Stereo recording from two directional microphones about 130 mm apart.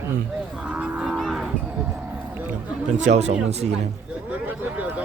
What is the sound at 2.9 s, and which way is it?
Speech, 60° right (ahead or behind).